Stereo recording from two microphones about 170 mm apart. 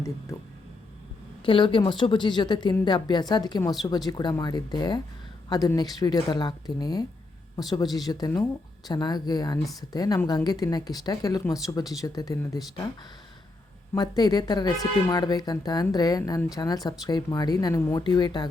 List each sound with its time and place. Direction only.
1.5 s a woman's voice: 30° left (ahead or behind)
13.9 s a woman's voice: 25° left (ahead or behind)